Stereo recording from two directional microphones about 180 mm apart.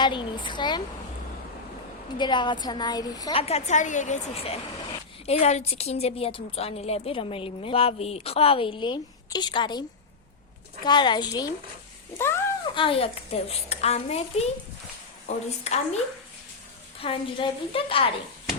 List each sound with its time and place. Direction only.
0.0 s a woman's voice: 25° left (ahead or behind)
2.1 s a woman's voice: 25° left (ahead or behind)
3.4 s a woman's voice: 40° left (ahead or behind)
10.8 s a woman's voice: 25° left (ahead or behind)
12.1 s cat: 15° left (ahead or behind)
12.7 s a woman's voice: 30° left (ahead or behind)
17.0 s a woman's voice: 30° left (ahead or behind)